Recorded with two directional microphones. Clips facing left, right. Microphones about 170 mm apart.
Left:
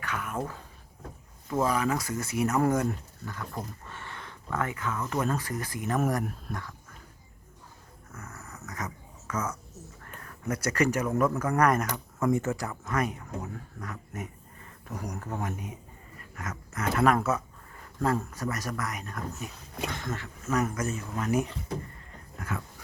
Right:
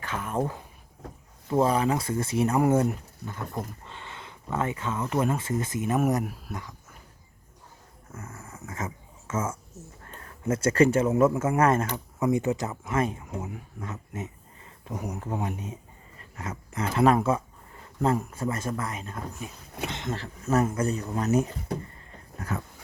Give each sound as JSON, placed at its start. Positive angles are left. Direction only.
{"t": 0.0, "sound": "speech", "side_deg": -30}
{"t": 8.1, "sound": "roaring cats", "side_deg": -30}
{"t": 10.0, "sound": "a sound", "side_deg": -30}
{"t": 11.2, "sound": "speech", "side_deg": -25}
{"t": 13.2, "sound": "a sound", "side_deg": -15}
{"t": 14.9, "sound": "speech", "side_deg": -15}
{"t": 15.5, "sound": "speech", "side_deg": -25}
{"t": 22.4, "sound": "dog", "side_deg": -35}